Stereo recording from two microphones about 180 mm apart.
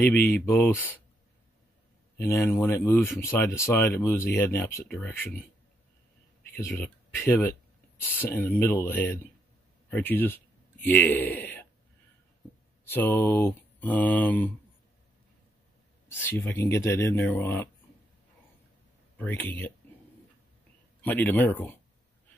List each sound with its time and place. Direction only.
0.0 s speech: 10° left (ahead or behind)
2.1 s speech: 10° left (ahead or behind)
6.5 s speech: 10° left (ahead or behind)
12.8 s speech: 10° left (ahead or behind)
16.1 s speech: 10° left (ahead or behind)
19.1 s speech: 10° left (ahead or behind)
21.0 s speech: 10° left (ahead or behind)